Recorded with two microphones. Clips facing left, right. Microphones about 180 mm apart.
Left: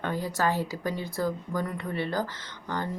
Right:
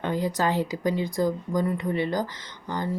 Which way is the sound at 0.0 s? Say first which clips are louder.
Right 3 dB; 15° right (ahead or behind).